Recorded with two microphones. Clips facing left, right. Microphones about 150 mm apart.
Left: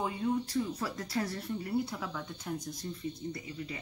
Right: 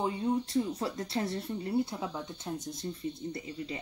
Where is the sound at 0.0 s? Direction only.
25° right (ahead or behind).